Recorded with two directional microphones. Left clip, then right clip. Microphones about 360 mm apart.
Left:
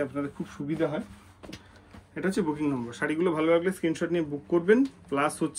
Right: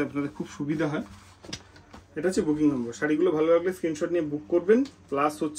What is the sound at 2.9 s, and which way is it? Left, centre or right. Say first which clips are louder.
Speech: right 3 dB; centre.